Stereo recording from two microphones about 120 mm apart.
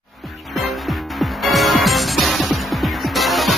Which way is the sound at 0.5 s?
Centre (ahead or behind).